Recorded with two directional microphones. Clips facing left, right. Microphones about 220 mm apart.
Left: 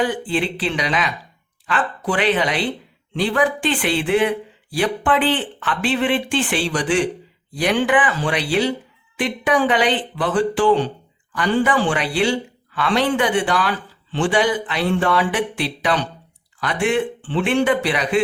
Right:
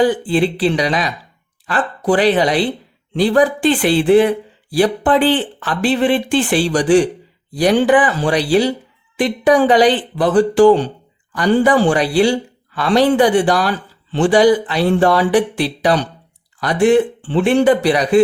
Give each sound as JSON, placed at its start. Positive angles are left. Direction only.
{"t": 0.0, "sound": "speech", "side_deg": -35}